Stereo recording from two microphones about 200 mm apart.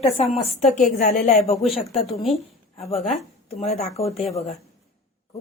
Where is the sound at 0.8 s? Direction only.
40° left (ahead or behind).